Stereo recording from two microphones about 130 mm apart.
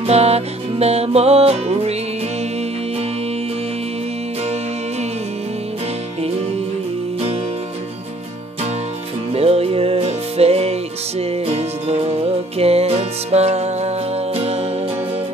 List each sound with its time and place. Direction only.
0.0 s music: 55° right (ahead or behind)
9.3 s music: 50° right (ahead or behind)